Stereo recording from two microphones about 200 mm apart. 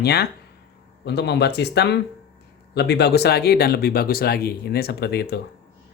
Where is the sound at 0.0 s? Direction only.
55° left (ahead or behind).